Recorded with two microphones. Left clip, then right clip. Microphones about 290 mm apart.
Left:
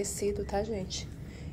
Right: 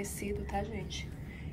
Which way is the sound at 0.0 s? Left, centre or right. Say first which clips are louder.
Left 7 dB; left.